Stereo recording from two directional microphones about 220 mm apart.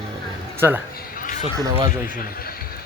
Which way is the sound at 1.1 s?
40° left (ahead or behind).